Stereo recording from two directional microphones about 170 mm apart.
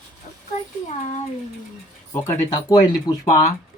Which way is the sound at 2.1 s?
20° left (ahead or behind).